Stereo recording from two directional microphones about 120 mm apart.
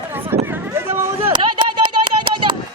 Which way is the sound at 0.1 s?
20° right (ahead or behind).